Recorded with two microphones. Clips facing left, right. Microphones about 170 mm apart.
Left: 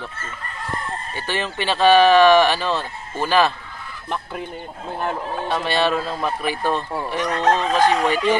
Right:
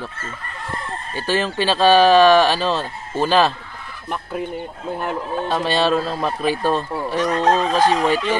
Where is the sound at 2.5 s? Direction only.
15° right (ahead or behind).